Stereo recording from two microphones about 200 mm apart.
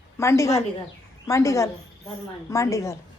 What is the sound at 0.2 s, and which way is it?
Speech, 15° left (ahead or behind).